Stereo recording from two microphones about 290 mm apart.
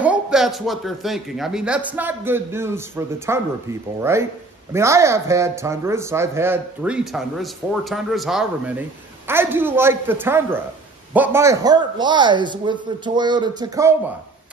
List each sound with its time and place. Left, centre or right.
0.0 s a man's voice: centre